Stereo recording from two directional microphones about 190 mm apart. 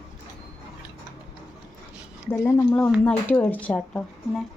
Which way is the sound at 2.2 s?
15° left (ahead or behind).